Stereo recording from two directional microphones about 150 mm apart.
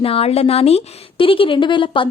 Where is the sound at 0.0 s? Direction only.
40° left (ahead or behind).